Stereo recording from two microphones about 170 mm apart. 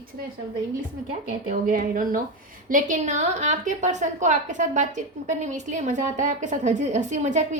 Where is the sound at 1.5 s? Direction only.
50° right (ahead or behind).